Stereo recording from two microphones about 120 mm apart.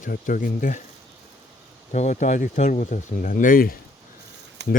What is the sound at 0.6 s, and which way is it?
Speech, 90° left.